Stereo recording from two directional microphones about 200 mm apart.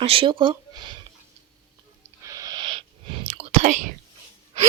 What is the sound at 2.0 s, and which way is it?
Whispering, 15° right (ahead or behind).